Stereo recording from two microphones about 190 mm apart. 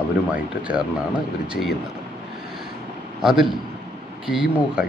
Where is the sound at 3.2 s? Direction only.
Centre (ahead or behind).